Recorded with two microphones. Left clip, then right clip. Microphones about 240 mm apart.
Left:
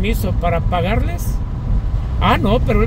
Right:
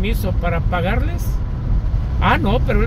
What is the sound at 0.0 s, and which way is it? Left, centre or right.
Speech, centre.